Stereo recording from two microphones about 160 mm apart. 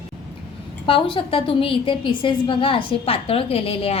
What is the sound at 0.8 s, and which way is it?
A woman's voice, 30° left (ahead or behind).